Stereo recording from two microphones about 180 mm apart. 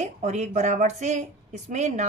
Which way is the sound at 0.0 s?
40° right (ahead or behind).